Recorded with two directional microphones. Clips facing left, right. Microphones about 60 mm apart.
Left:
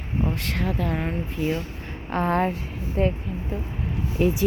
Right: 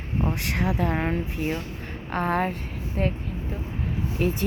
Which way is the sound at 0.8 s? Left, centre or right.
Right.